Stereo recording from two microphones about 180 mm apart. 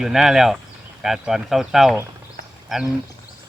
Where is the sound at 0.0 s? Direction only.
Centre (ahead or behind).